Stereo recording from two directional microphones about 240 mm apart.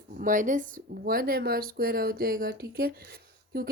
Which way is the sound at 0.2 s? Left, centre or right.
Right.